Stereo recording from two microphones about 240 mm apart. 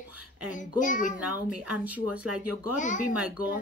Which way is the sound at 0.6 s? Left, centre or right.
Left.